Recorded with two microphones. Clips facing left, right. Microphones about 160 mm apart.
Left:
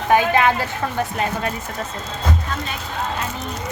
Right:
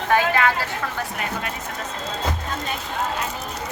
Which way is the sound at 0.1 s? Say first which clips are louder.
Left 3 dB; 20° left (ahead or behind).